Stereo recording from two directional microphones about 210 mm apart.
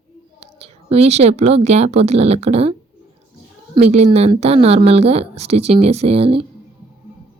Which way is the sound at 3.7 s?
30° right (ahead or behind).